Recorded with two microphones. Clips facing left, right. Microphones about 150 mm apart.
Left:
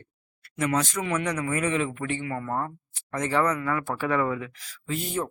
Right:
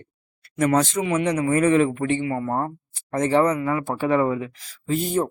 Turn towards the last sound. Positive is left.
turn(degrees=-40)  # may be behind; listen again after turning